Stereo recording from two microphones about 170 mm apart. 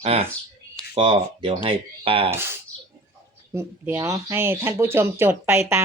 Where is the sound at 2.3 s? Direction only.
15° right (ahead or behind).